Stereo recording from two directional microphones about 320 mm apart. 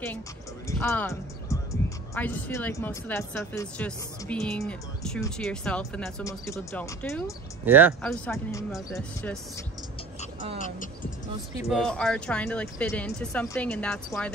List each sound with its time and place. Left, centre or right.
0.7 s speech: centre
7.6 s speech: centre
11.7 s speech: centre